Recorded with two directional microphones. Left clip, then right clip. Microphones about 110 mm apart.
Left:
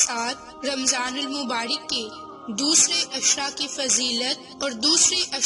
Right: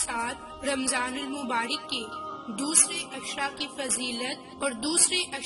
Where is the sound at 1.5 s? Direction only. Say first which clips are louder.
Right 1 dB; 55° left (ahead or behind).